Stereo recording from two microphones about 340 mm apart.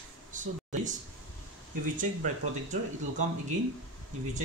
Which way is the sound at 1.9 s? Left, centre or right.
Right.